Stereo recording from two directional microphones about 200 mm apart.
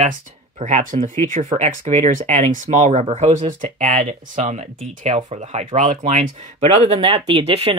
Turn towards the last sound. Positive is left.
turn(degrees=-25)  # may be behind; listen again after turning